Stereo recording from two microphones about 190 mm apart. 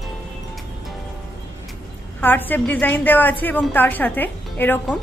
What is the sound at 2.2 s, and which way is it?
A woman's voice, 10° left (ahead or behind).